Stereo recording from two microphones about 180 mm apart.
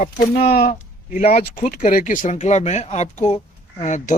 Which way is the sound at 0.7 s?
45° left (ahead or behind).